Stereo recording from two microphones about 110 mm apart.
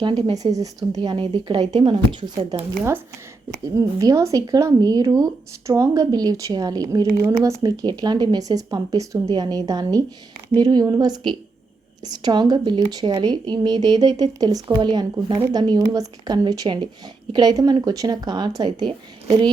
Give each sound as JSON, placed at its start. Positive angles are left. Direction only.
{"t": 0.3, "sound": "speech", "side_deg": -35}
{"t": 3.8, "sound": "speech", "side_deg": -30}